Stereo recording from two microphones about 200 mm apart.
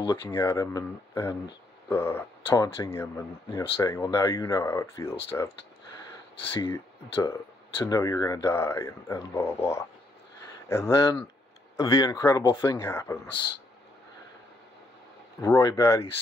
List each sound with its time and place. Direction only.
0.1 s speech: 10° left (ahead or behind)
6.6 s speech: 20° left (ahead or behind)
15.4 s speech: 15° left (ahead or behind)